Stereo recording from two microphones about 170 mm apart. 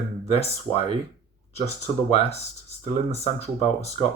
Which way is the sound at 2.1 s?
40° left (ahead or behind).